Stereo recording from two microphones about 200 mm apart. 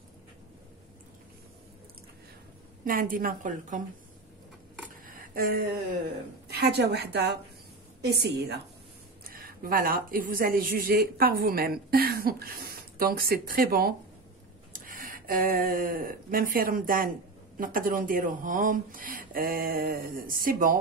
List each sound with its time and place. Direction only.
2.8 s speech: 45° right (ahead or behind)
5.0 s a sound: 45° right (ahead or behind)
6.5 s a woman's voice: 55° right (ahead or behind)
9.2 s speech: 45° right (ahead or behind)